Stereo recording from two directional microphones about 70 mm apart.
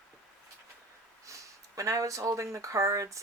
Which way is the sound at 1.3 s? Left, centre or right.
Right.